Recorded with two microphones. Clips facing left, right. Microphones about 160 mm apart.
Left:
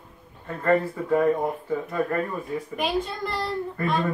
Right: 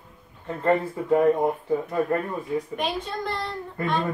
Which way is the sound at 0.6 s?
20° right (ahead or behind).